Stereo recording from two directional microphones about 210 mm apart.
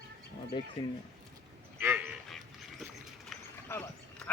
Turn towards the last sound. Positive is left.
turn(degrees=5)  # may be behind; listen again after turning